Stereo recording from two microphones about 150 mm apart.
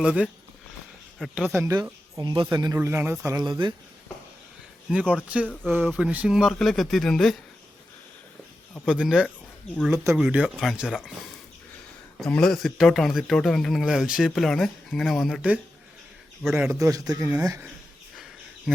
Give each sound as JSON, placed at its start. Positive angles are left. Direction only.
{"t": 0.0, "sound": "a man's voice", "side_deg": -5}
{"t": 1.5, "sound": "speech", "side_deg": -25}
{"t": 2.7, "sound": "speech", "side_deg": -15}
{"t": 4.9, "sound": "a man's voice", "side_deg": -10}
{"t": 8.9, "sound": "a man's voice", "side_deg": -5}
{"t": 9.9, "sound": "speech", "side_deg": -20}
{"t": 10.2, "sound": "a man's voice", "side_deg": -5}
{"t": 12.1, "sound": "a man's voice", "side_deg": 5}